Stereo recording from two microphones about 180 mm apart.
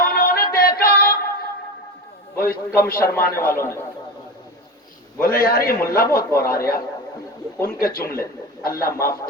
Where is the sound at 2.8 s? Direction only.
15° left (ahead or behind).